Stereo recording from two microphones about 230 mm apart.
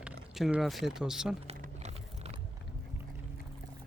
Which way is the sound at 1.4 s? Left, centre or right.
Right.